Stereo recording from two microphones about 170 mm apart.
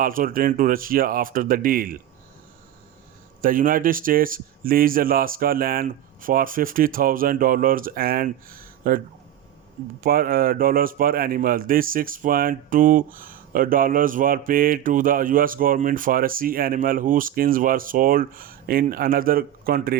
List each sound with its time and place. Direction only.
0.0 s a man's voice: 55° right (ahead or behind)
3.4 s a man's voice: 55° right (ahead or behind)
10.0 s a man's voice: 60° right (ahead or behind)